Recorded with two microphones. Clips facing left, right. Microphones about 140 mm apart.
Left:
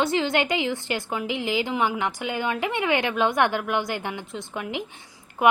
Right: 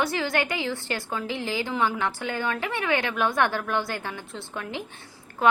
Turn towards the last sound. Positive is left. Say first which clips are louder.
# left 2 dB
turn(degrees=20)  # may be behind; listen again after turning